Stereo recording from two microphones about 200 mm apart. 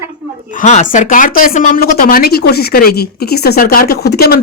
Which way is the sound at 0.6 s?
40° left (ahead or behind).